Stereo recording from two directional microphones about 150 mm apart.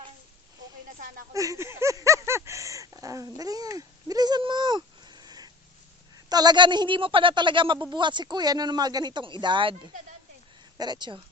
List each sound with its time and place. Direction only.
1.3 s a sound: 20° right (ahead or behind)
6.2 s speech: 25° right (ahead or behind)
10.8 s speech: 30° right (ahead or behind)